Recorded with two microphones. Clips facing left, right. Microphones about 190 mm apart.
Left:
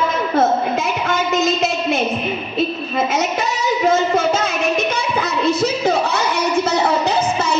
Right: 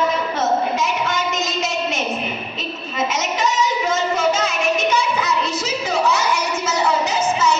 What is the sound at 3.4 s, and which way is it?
Music, 60° left (ahead or behind).